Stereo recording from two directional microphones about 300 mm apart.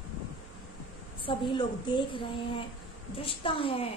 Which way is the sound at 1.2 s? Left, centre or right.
Centre.